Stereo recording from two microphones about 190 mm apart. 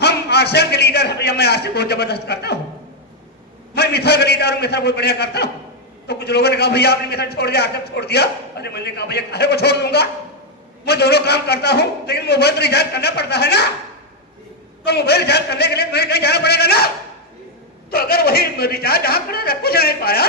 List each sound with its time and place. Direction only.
0.0 s a man's voice: 60° left (ahead or behind)
3.8 s a man's voice: 60° left (ahead or behind)
14.8 s a man's voice: 60° left (ahead or behind)
17.9 s a man's voice: 55° left (ahead or behind)